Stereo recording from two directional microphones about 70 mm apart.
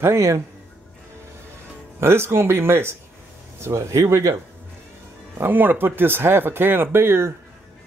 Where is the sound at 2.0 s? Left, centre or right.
Right.